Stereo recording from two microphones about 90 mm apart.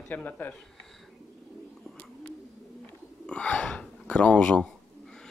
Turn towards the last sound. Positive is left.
turn(degrees=10)  # may be behind; listen again after turning